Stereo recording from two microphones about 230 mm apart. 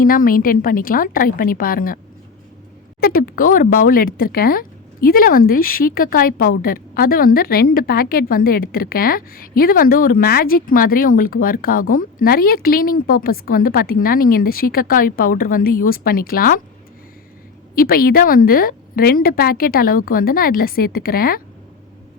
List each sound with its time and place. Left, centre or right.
0.0 s speech: left
3.0 s speech: left
17.7 s speech: left